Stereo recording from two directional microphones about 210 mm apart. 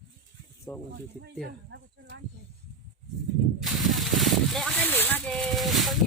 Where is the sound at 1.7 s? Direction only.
55° right (ahead or behind).